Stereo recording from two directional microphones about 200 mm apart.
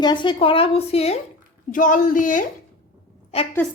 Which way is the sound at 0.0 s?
20° left (ahead or behind).